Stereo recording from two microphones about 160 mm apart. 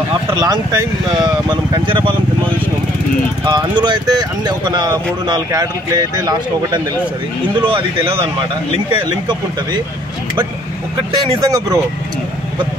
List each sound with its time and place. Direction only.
0.4 s speech: 25° right (ahead or behind)
8.0 s speech: 15° right (ahead or behind)
11.1 s speech: 25° right (ahead or behind)